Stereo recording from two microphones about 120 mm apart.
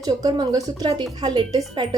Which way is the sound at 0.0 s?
35° right (ahead or behind).